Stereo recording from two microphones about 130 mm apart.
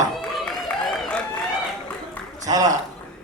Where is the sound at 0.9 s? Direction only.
10° left (ahead or behind).